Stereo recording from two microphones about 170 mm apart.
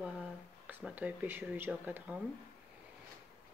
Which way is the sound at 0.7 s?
10° right (ahead or behind).